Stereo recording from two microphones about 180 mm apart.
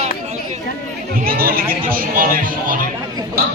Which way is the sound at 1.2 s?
55° right (ahead or behind).